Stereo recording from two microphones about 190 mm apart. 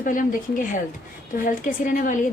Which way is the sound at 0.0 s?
45° left (ahead or behind).